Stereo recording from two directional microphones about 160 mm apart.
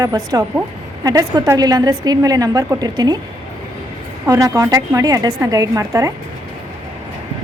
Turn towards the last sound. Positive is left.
turn(degrees=-20)  # may be behind; listen again after turning